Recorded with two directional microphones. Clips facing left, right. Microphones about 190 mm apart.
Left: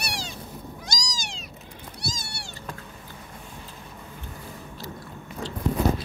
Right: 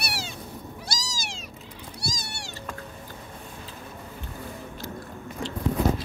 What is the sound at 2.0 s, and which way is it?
Cat, 15° right (ahead or behind).